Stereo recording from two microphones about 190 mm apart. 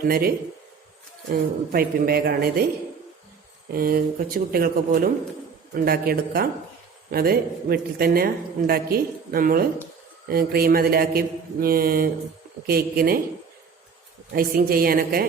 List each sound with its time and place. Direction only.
0.1 s a woman's voice: 50° right (ahead or behind)
3.7 s a woman's voice: 50° right (ahead or behind)
14.3 s a woman's voice: 50° right (ahead or behind)